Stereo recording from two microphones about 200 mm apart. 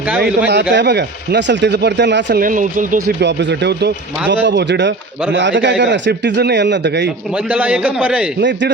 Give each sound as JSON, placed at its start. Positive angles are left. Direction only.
{"t": 0.2, "sound": "speech", "side_deg": -60}
{"t": 2.4, "sound": "speech", "side_deg": -40}
{"t": 3.2, "sound": "speech", "side_deg": -60}
{"t": 7.3, "sound": "a man's voice", "side_deg": -5}
{"t": 8.4, "sound": "speech", "side_deg": -60}